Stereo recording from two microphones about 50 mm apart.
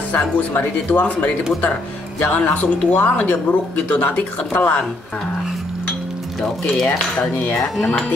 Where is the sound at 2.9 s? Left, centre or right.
Left.